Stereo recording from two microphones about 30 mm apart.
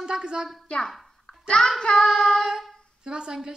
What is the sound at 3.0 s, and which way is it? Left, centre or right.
Speech, right.